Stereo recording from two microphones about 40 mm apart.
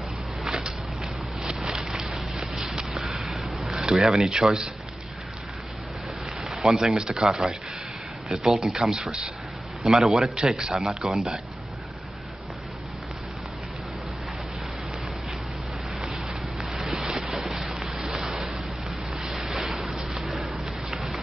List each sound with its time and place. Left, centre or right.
0.5 s a sound: centre
3.8 s speech: centre
6.4 s speech: centre
8.5 s speech: centre
16.5 s a sound: centre
20.9 s rain: centre